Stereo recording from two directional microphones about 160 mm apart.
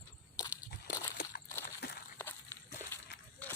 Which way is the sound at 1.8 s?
90° left.